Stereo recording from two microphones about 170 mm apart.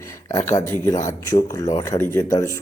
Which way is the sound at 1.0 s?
20° left (ahead or behind).